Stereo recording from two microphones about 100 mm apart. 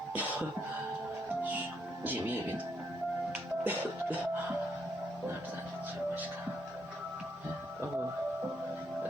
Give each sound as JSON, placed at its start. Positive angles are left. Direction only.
{"t": 0.1, "sound": "music", "side_deg": -15}
{"t": 2.0, "sound": "speech", "side_deg": -20}
{"t": 3.6, "sound": "music", "side_deg": -15}